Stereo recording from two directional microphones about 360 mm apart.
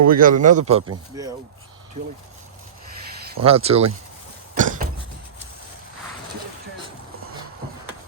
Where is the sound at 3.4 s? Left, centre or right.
Centre.